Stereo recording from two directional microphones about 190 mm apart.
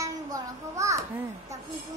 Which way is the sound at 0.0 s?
15° right (ahead or behind).